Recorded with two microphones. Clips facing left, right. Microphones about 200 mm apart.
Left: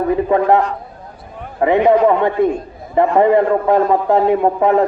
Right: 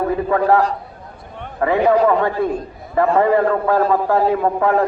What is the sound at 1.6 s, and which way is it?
A man's voice, 20° left (ahead or behind).